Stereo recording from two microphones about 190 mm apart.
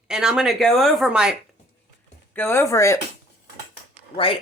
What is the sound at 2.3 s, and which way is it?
Speech, 10° left (ahead or behind).